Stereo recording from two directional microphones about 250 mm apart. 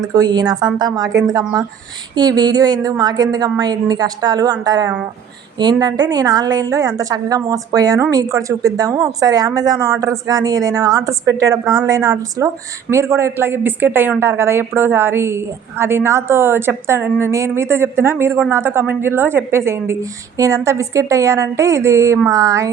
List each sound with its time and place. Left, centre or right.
0.0 s a woman's voice: centre